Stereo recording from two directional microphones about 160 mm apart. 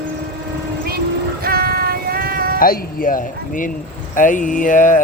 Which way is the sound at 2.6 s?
65° left (ahead or behind).